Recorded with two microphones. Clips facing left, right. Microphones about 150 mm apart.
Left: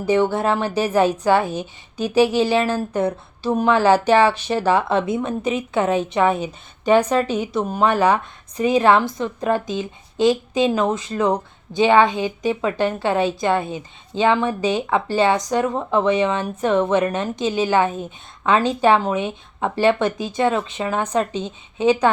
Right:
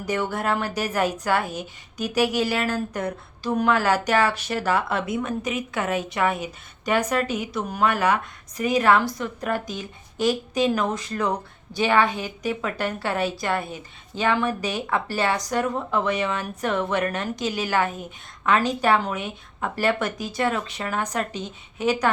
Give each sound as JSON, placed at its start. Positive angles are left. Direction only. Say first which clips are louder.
{"t": 0.0, "sound": "a woman's voice", "louder": "left 8 dB", "side_deg": 25}